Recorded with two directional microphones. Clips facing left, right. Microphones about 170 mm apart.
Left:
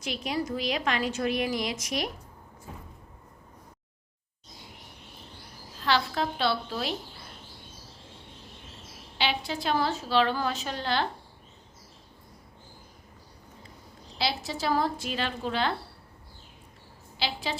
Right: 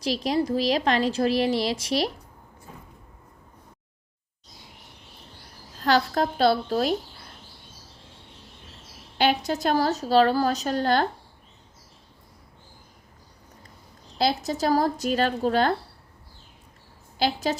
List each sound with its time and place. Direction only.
0.0 s a woman's voice: 35° right (ahead or behind)
5.8 s a woman's voice: 45° right (ahead or behind)
9.1 s a woman's voice: 45° right (ahead or behind)
14.2 s a woman's voice: 45° right (ahead or behind)
17.2 s a woman's voice: 45° right (ahead or behind)